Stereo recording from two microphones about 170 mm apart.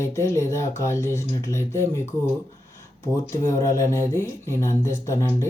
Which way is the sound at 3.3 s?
20° left (ahead or behind).